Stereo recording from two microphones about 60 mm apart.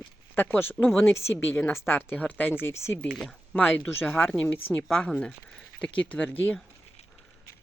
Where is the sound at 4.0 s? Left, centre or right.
Left; by 6.3 s centre.